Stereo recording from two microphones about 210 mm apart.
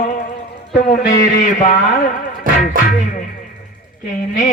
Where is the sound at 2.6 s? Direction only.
40° left (ahead or behind).